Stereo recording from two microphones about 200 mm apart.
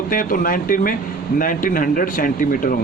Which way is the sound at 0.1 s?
45° left (ahead or behind).